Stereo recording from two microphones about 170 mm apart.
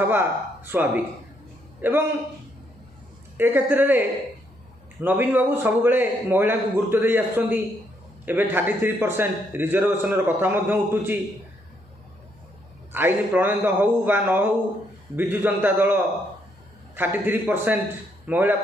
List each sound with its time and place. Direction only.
0.0 s a man's voice: 10° right (ahead or behind)
3.3 s a man's voice: 10° right (ahead or behind)
5.0 s a man's voice: 10° right (ahead or behind)
12.9 s a man's voice: 10° right (ahead or behind)